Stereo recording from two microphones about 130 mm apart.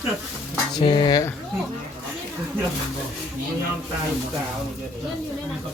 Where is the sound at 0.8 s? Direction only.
40° left (ahead or behind).